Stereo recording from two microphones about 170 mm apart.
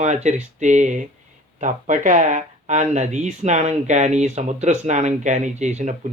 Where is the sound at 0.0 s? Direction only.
45° right (ahead or behind).